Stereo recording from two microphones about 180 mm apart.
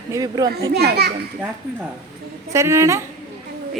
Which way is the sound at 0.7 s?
60° right (ahead or behind).